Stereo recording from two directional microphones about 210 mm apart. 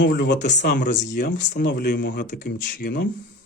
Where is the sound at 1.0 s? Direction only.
55° left (ahead or behind).